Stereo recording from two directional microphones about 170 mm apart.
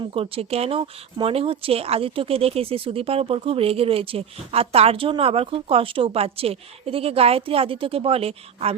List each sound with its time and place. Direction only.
0.1 s speech: 35° right (ahead or behind)